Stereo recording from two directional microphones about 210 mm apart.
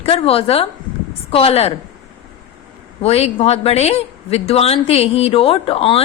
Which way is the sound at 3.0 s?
30° left (ahead or behind).